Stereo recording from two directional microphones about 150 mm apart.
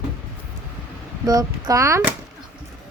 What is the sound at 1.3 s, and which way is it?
Speech, 25° right (ahead or behind).